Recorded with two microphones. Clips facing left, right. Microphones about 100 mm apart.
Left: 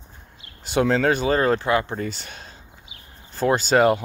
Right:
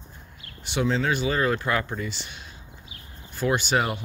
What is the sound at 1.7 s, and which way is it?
Speech, 25° left (ahead or behind).